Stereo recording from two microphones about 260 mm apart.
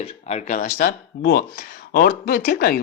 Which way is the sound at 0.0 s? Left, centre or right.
Left.